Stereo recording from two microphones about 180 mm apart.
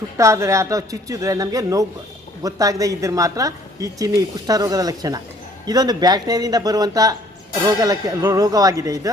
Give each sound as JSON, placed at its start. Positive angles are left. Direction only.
{"t": 0.2, "sound": "a woman's voice", "side_deg": -15}